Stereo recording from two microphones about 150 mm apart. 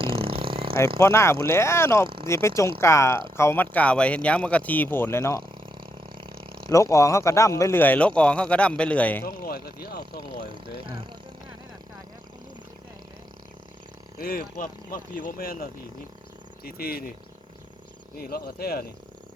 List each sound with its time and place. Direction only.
0.0 s a sound: 35° right (ahead or behind)
0.9 s speech: 20° left (ahead or behind)
5.6 s a sound: 35° right (ahead or behind)
6.7 s speech: 20° left (ahead or behind)
9.2 s speech: 90° left
10.2 s speech: 35° right (ahead or behind)
14.2 s speech: 80° left
16.6 s speech: 90° left
18.2 s speech: 90° left